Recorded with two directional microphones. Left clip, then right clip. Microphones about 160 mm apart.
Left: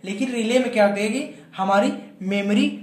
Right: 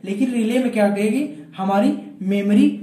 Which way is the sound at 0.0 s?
20° left (ahead or behind).